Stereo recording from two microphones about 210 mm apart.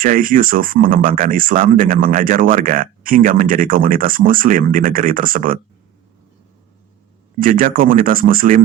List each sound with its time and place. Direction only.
0.0 s speech: 40° right (ahead or behind)
7.3 s speech: 40° right (ahead or behind)